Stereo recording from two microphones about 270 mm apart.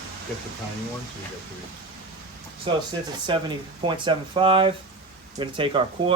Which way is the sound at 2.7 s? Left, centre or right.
Centre.